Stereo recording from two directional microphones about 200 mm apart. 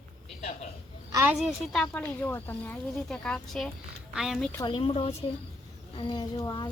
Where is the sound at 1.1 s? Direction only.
10° right (ahead or behind).